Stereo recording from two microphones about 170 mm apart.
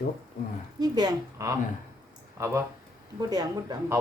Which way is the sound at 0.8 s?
25° right (ahead or behind).